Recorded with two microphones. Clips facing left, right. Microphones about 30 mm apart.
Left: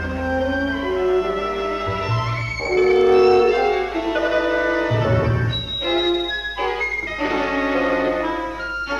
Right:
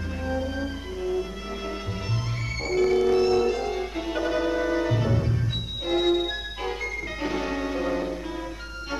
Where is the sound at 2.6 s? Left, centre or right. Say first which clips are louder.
Left 6 dB; left.